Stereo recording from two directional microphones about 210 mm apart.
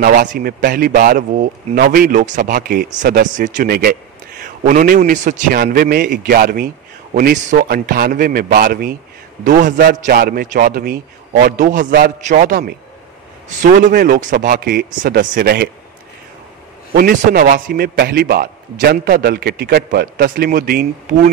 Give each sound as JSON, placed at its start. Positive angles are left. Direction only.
{"t": 0.0, "sound": "a man's voice", "side_deg": -45}
{"t": 16.9, "sound": "a man's voice", "side_deg": -45}